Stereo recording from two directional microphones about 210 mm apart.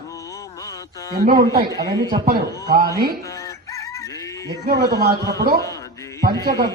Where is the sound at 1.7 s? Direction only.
20° right (ahead or behind).